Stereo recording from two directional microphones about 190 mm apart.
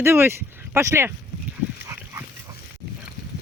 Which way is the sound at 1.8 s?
15° right (ahead or behind).